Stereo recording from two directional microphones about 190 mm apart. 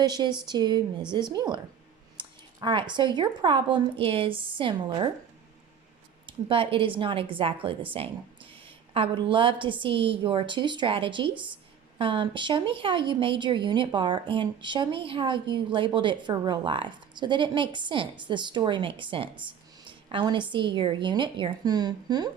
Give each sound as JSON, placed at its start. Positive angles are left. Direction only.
{"t": 0.0, "sound": "a woman's voice", "side_deg": -20}
{"t": 6.2, "sound": "a woman's voice", "side_deg": -30}